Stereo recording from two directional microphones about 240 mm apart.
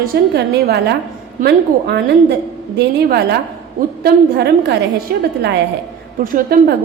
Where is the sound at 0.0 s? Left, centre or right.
Right.